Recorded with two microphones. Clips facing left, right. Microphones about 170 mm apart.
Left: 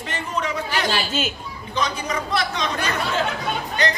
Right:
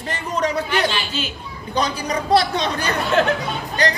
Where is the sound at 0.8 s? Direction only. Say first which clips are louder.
Left 1 dB; 45° left (ahead or behind).